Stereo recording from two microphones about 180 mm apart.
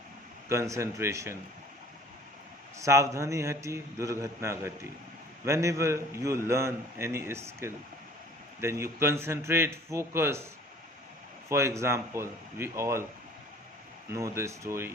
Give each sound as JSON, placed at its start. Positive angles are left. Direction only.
{"t": 0.4, "sound": "a man's voice", "side_deg": -15}
{"t": 2.7, "sound": "a man's voice", "side_deg": -15}
{"t": 11.4, "sound": "a man's voice", "side_deg": -15}
{"t": 14.1, "sound": "a man's voice", "side_deg": -15}